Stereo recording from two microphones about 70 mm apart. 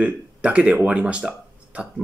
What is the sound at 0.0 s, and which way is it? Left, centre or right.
Speech, centre.